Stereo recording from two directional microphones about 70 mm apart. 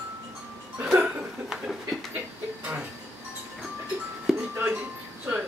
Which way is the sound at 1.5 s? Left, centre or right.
Centre.